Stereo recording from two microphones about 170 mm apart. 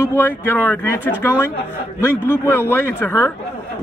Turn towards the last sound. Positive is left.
turn(degrees=15)  # may be behind; listen again after turning